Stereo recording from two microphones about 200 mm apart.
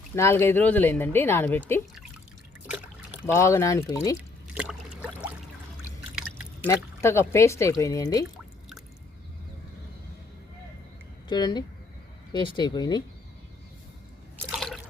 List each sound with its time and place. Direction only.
0.2 s speech: 15° left (ahead or behind)
2.6 s trickle: 5° right (ahead or behind)
3.3 s speech: 15° left (ahead or behind)
4.5 s boat: 5° right (ahead or behind)
6.7 s speech: 15° left (ahead or behind)
11.3 s speech: 20° left (ahead or behind)
14.5 s drip: centre (ahead or behind)